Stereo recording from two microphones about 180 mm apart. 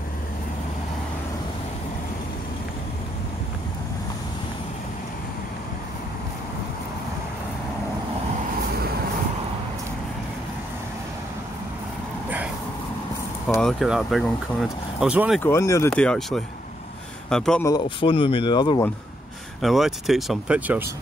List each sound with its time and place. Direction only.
13.6 s speech: centre (ahead or behind)
15.4 s speech: 15° left (ahead or behind)
15.9 s speech: 5° left (ahead or behind)
17.6 s speech: 25° left (ahead or behind)
19.6 s speech: centre (ahead or behind)